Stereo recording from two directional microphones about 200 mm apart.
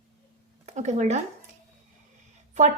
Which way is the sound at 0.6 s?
35° right (ahead or behind).